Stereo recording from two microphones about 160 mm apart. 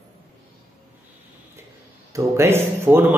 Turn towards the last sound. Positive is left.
turn(degrees=-15)  # may be behind; listen again after turning